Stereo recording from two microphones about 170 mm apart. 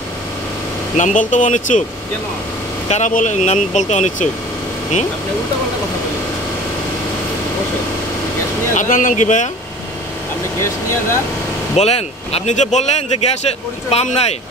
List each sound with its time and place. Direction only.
0.9 s speech: 50° left (ahead or behind)
2.9 s speech: 50° left (ahead or behind)
8.7 s speech: 50° left (ahead or behind)
10.6 s speech: 15° left (ahead or behind)
11.7 s speech: 40° left (ahead or behind)